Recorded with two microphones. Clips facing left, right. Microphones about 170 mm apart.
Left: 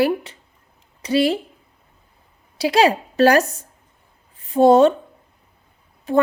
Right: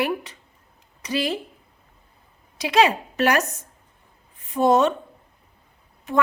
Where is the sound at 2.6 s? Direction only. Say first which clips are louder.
Left 3 dB; 35° left (ahead or behind).